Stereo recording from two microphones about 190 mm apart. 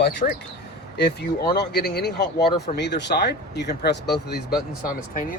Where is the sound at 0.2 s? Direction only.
35° left (ahead or behind).